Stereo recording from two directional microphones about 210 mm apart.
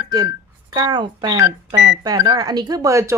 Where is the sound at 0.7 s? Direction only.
20° right (ahead or behind).